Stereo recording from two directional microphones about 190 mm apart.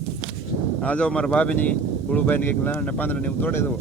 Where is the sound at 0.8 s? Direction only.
5° left (ahead or behind).